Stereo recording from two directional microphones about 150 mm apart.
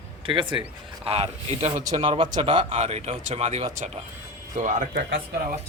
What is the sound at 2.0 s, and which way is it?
Speech, 35° right (ahead or behind).